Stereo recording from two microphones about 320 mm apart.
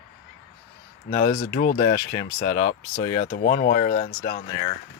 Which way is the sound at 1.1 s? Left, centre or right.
Left.